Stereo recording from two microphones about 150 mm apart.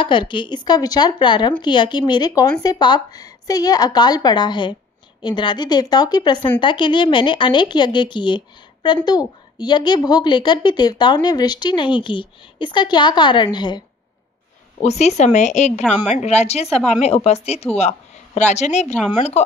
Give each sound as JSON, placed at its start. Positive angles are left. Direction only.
{"t": 0.0, "sound": "a woman's voice", "side_deg": 30}
{"t": 14.8, "sound": "speech", "side_deg": 45}